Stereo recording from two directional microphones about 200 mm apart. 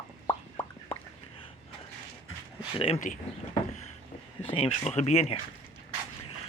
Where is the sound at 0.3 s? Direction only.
20° left (ahead or behind).